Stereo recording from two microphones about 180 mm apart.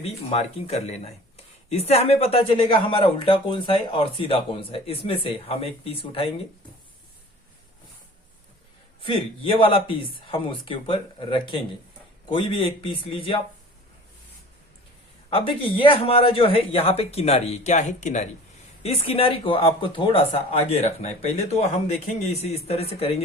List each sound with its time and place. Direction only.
0.0 s speech: 35° left (ahead or behind)
9.0 s speech: 30° left (ahead or behind)
15.3 s speech: 30° left (ahead or behind)